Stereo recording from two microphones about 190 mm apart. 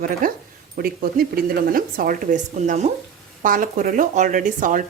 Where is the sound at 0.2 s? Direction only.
45° right (ahead or behind).